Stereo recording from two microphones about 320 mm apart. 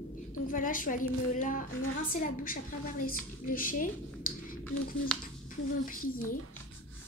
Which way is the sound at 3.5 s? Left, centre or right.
Left.